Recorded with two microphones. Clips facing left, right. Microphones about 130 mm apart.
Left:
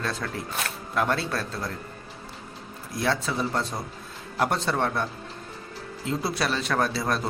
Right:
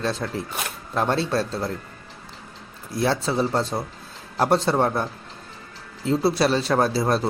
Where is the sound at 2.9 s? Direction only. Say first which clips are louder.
Right 4 dB; 30° right (ahead or behind).